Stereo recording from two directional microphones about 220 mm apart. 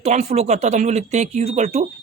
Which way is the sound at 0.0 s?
30° right (ahead or behind).